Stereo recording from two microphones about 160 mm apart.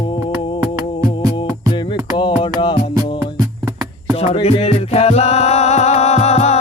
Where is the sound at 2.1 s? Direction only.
30° left (ahead or behind).